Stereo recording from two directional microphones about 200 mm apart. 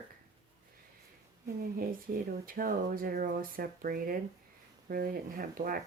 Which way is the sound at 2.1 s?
45° right (ahead or behind).